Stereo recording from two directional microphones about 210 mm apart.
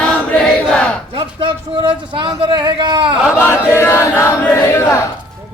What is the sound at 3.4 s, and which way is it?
Chant, 10° left (ahead or behind).